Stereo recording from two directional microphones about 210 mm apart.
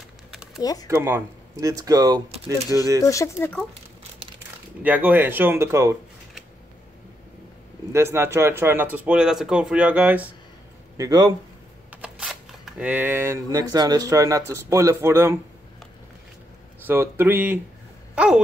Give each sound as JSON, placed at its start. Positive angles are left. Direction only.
{"t": 0.6, "sound": "speech", "side_deg": 15}
{"t": 0.8, "sound": "speech", "side_deg": -10}
{"t": 3.0, "sound": "speech", "side_deg": 15}
{"t": 4.8, "sound": "speech", "side_deg": -10}
{"t": 7.9, "sound": "speech", "side_deg": -15}
{"t": 12.0, "sound": "speech", "side_deg": -5}
{"t": 16.8, "sound": "speech", "side_deg": -10}